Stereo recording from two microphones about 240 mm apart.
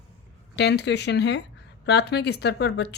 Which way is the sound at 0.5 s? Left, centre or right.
Left.